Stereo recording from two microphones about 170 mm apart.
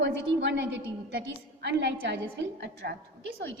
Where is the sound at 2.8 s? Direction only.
80° right.